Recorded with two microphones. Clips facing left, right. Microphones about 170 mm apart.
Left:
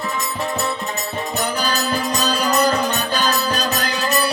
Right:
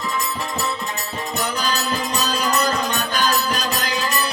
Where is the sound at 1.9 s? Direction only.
35° left (ahead or behind).